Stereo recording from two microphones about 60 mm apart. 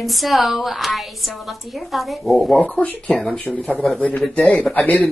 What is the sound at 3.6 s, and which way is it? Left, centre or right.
Speech, centre.